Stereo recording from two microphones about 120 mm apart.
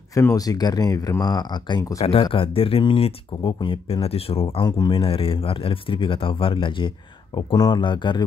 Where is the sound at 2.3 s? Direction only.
50° left (ahead or behind).